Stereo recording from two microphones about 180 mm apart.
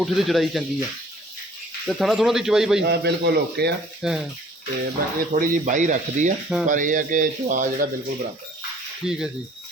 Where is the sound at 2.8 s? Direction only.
65° right (ahead or behind).